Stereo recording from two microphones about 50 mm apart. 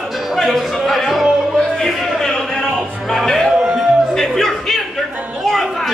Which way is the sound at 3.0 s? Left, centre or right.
Centre.